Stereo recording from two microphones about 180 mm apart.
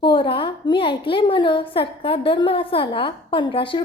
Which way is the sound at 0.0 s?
25° left (ahead or behind).